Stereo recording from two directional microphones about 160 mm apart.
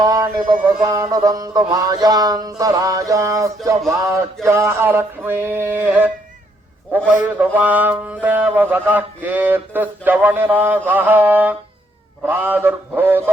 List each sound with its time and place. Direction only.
0.0 s music: 25° right (ahead or behind)
4.4 s mantra: 15° right (ahead or behind)
7.1 s mantra: 10° right (ahead or behind)